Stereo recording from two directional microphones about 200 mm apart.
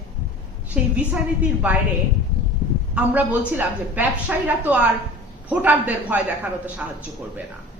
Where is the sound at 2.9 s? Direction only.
10° right (ahead or behind).